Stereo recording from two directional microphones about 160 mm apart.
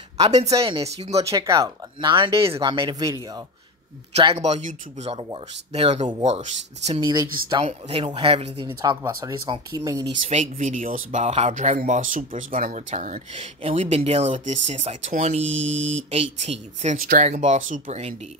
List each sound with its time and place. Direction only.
0.2 s speech: 40° right (ahead or behind)
1.3 s speech: 20° right (ahead or behind)
2.3 s speech: 15° right (ahead or behind)
2.6 s speech: 30° right (ahead or behind)
4.1 s speech: 35° right (ahead or behind)
7.0 s speech: 25° right (ahead or behind)
7.6 s speech: 40° right (ahead or behind)
8.8 s speech: 25° right (ahead or behind)
10.3 s speech: 50° right (ahead or behind)
13.3 s speech: 40° right (ahead or behind); by 17.8 s 55° right (ahead or behind)
17.8 s speech: 40° right (ahead or behind)